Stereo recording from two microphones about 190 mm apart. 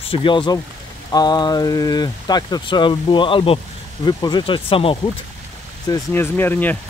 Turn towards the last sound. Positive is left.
turn(degrees=10)  # may be behind; listen again after turning